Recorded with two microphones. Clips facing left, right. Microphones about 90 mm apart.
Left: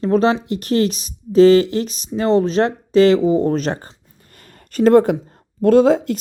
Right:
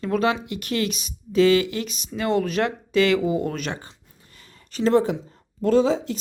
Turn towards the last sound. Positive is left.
turn(degrees=55)  # may be behind; listen again after turning